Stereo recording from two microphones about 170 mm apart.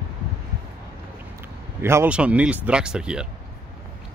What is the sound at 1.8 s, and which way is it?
Speech, 15° right (ahead or behind).